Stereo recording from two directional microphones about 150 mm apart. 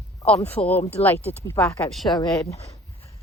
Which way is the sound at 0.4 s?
10° left (ahead or behind).